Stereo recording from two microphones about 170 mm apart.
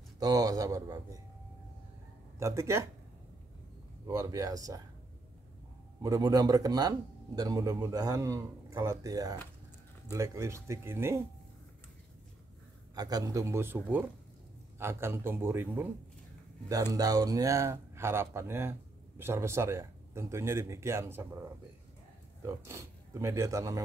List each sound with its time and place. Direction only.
0.2 s speech: 20° right (ahead or behind)
2.3 s speech: 15° right (ahead or behind)
4.0 s speech: 20° right (ahead or behind)
6.0 s speech: 20° right (ahead or behind)
12.9 s speech: 20° right (ahead or behind)
22.4 s speech: 15° right (ahead or behind)